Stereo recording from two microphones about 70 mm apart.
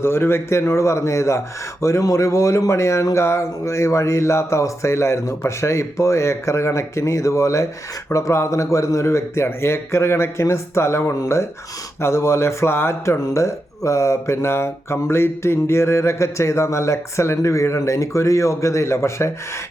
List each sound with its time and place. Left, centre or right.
0.0 s a man's voice: left